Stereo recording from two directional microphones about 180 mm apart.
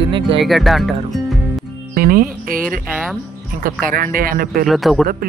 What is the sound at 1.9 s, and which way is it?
Speech, 55° right (ahead or behind).